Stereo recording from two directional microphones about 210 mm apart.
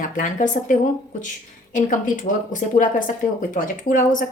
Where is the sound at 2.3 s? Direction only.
40° left (ahead or behind).